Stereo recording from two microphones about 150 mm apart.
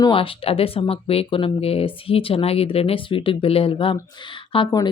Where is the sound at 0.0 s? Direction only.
35° left (ahead or behind).